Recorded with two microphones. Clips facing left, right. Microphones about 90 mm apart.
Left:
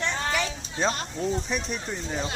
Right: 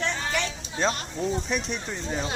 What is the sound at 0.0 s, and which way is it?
A child's voice, centre (ahead or behind).